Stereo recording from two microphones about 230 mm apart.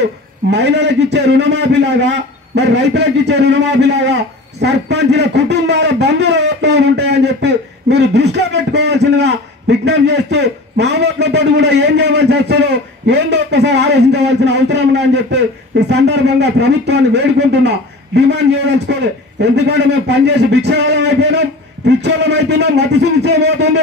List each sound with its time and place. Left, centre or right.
0.5 s a man's voice: right